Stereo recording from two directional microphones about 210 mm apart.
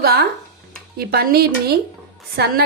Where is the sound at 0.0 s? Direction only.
45° right (ahead or behind).